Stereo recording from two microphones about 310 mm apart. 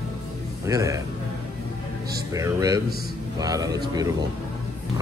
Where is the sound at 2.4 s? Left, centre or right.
Centre.